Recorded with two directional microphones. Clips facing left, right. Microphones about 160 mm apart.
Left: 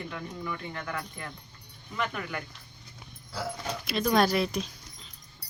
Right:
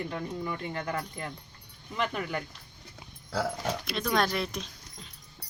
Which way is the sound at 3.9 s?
5° left (ahead or behind).